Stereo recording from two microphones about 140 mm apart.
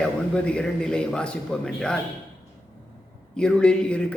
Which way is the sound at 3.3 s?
5° left (ahead or behind).